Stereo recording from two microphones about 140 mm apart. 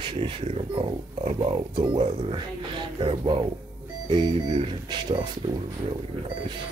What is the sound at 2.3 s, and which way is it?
Speech, 35° right (ahead or behind).